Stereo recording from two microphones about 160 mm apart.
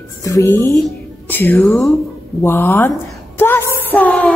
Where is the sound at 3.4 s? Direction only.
15° left (ahead or behind).